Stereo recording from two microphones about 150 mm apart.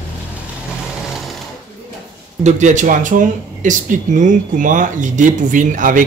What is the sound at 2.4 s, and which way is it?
Speech, 55° right (ahead or behind).